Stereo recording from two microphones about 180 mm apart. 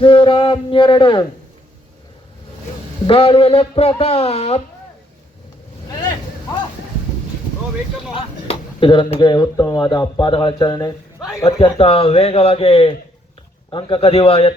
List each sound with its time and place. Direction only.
0.0 s speech: 30° left (ahead or behind)
3.1 s speech: 30° left (ahead or behind)
8.1 s speech: 30° left (ahead or behind)